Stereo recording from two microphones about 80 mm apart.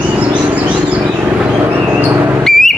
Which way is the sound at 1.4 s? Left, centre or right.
Centre.